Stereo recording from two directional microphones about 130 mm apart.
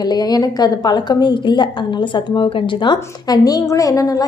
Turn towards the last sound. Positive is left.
turn(degrees=25)  # may be behind; listen again after turning